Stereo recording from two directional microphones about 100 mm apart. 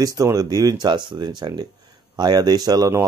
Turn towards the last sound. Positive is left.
turn(degrees=-40)  # may be behind; listen again after turning